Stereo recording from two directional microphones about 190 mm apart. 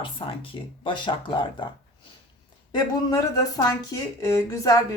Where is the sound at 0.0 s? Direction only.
25° left (ahead or behind).